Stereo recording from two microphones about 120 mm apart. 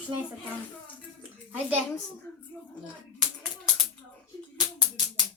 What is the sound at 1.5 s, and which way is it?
Speech, 15° right (ahead or behind).